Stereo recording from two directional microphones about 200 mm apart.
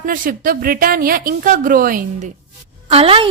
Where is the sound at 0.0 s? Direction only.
45° right (ahead or behind).